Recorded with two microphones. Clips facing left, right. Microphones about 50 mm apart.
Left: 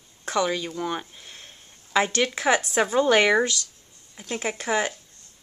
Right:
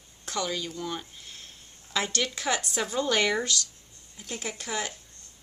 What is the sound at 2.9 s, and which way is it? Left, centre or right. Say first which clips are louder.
Speech: left 7 dB; left.